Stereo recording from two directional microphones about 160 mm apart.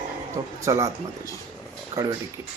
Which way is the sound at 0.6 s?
20° right (ahead or behind).